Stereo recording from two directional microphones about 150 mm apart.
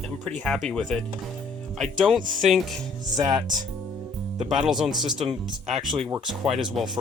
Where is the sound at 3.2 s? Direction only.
25° right (ahead or behind).